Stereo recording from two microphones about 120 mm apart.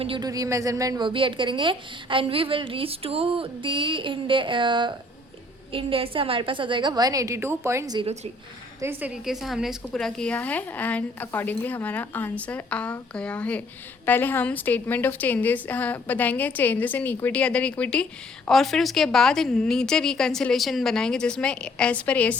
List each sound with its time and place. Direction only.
0.2 s speech: 30° right (ahead or behind)
1.0 s a woman's voice: 45° right (ahead or behind); by 7.9 s 25° right (ahead or behind)
8.0 s a woman's voice: 65° right (ahead or behind)
8.8 s a woman's voice: 15° right (ahead or behind)
9.2 s a woman's voice: centre (ahead or behind)